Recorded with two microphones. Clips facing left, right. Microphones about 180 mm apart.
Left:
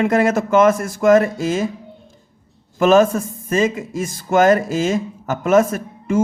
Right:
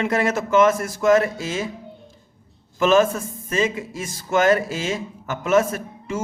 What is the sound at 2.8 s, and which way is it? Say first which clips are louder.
A man's voice: left 4 dB; 45° left (ahead or behind).